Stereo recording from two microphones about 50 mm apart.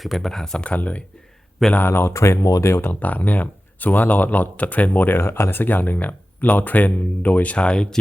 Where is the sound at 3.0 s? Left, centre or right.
Left.